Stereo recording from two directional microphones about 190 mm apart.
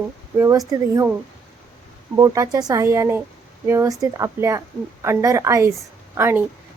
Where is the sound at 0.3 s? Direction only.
15° right (ahead or behind).